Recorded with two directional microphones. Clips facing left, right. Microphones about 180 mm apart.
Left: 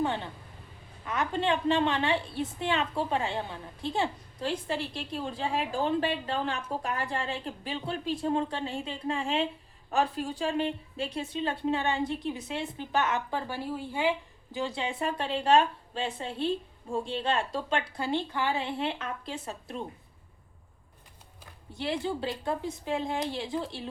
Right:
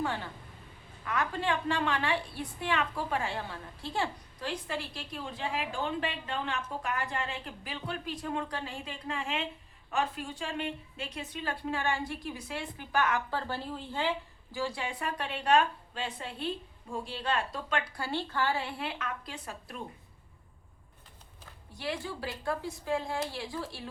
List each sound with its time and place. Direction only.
0.0 s a woman's voice: 20° left (ahead or behind)
21.8 s a woman's voice: 25° left (ahead or behind)